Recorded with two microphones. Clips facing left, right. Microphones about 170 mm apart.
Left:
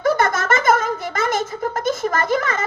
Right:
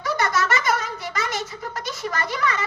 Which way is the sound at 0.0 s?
50° left (ahead or behind).